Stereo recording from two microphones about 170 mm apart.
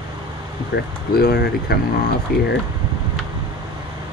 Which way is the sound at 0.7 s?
90° left.